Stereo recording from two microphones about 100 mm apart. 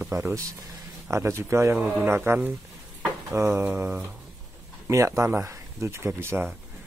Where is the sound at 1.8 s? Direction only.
15° right (ahead or behind).